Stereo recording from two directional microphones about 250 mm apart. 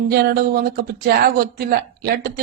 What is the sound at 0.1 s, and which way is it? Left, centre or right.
Speech, right.